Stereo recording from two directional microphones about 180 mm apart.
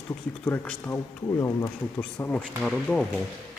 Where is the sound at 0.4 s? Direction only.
10° left (ahead or behind).